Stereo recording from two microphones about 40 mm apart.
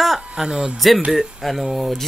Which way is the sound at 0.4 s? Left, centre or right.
Centre.